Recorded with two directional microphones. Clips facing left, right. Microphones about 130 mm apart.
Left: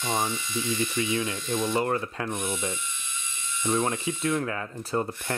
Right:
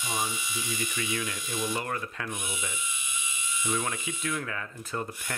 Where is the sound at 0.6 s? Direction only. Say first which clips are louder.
Left 8 dB; 10° right (ahead or behind).